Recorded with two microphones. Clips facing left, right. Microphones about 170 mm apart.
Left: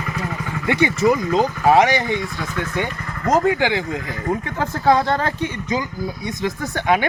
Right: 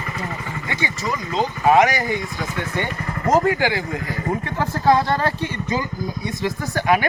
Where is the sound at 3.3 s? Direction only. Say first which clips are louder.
Left 1 dB; 20° left (ahead or behind).